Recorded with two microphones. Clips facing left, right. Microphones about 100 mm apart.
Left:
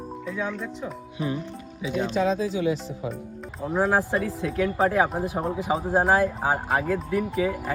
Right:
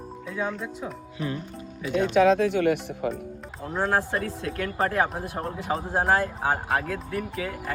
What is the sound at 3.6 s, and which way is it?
Speech, 5° left (ahead or behind).